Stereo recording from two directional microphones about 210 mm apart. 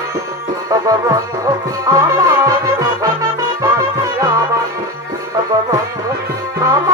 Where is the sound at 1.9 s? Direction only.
15° right (ahead or behind).